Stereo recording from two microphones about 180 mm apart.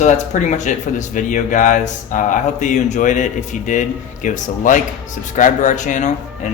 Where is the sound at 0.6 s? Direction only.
45° left (ahead or behind).